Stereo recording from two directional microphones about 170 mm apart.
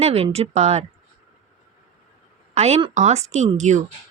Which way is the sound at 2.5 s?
40° right (ahead or behind).